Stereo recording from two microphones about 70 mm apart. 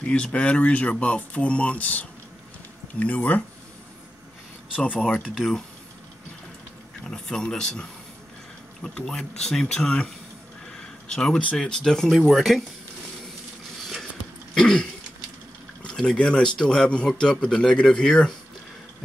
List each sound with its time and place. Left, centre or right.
0.0 s speech: centre
5.3 s speech: centre
7.1 s speech: centre
8.8 s speech: centre
11.1 s speech: centre
14.5 s throat clearing: centre
15.8 s speech: centre